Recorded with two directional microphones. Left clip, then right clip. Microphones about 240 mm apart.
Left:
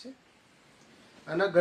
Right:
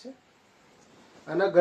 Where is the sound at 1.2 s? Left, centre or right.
Left.